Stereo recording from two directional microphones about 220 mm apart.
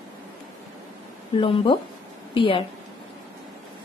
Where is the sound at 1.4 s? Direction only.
25° left (ahead or behind).